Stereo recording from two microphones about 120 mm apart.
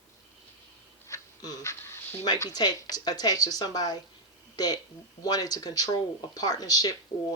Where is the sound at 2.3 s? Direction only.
35° left (ahead or behind).